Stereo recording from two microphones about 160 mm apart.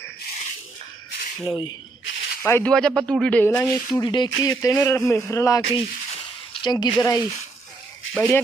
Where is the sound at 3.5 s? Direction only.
20° left (ahead or behind).